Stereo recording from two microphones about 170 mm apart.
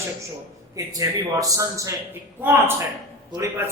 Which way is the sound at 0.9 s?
20° right (ahead or behind).